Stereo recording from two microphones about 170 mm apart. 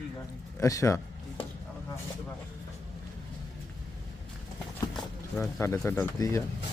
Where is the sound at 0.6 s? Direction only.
20° left (ahead or behind).